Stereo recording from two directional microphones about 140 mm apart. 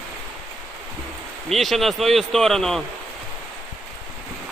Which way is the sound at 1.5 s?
Centre (ahead or behind).